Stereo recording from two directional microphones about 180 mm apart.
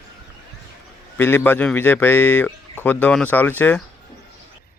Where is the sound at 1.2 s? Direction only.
10° left (ahead or behind).